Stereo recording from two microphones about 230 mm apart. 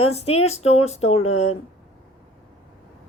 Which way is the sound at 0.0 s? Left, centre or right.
Left.